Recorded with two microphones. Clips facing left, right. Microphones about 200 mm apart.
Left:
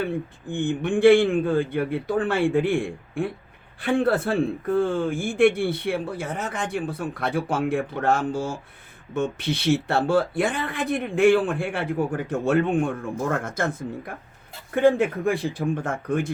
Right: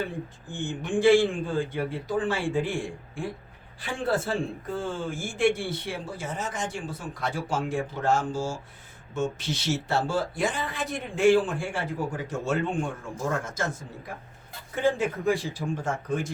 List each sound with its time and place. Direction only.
0.4 s speech: 60° left (ahead or behind)